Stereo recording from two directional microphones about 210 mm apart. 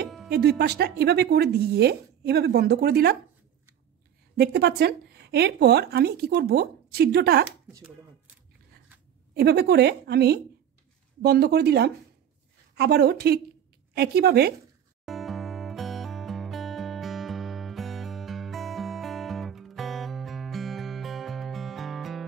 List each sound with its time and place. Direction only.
0.3 s speech: 50° right (ahead or behind)
4.4 s speech: 50° right (ahead or behind)
7.4 s speech: 5° right (ahead or behind)
9.3 s speech: 50° right (ahead or behind)
15.0 s music: centre (ahead or behind)